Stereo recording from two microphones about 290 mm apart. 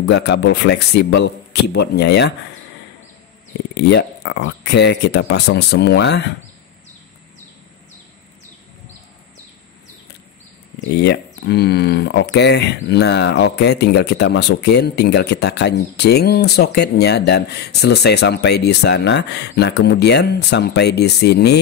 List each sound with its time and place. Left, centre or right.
0.0 s speech: left
3.7 s speech: left
10.9 s speech: left